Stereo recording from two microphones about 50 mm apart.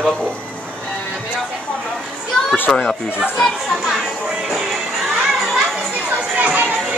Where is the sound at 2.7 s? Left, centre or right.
Centre.